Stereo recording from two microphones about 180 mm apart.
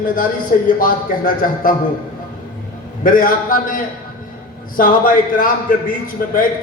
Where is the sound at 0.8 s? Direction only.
50° left (ahead or behind).